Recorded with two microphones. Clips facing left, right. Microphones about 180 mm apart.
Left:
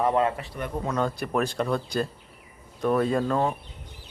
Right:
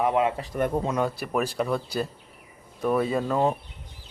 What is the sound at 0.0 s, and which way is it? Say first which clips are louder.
Speech: even; 10° right (ahead or behind).